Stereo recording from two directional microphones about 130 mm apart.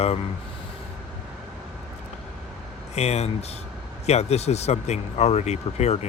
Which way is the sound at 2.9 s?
55° left (ahead or behind).